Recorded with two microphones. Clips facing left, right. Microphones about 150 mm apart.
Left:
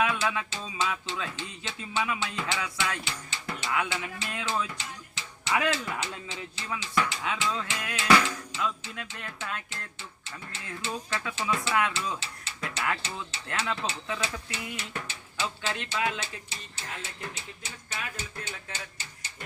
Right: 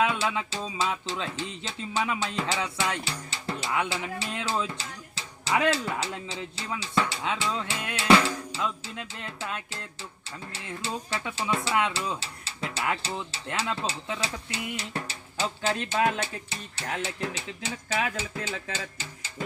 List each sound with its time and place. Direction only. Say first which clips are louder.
0.0 s speech: right 2 dB; 25° right (ahead or behind)
0.5 s music: right 2 dB; 35° right (ahead or behind)
9.0 s speech: right 2 dB; 25° right (ahead or behind)
11.1 s speech: right 1 dB; 30° right (ahead or behind)
14.8 s music: right 3 dB; 35° right (ahead or behind); by 18.6 s 90° right